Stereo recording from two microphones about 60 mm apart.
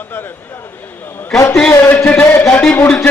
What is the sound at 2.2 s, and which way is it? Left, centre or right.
Speech, left.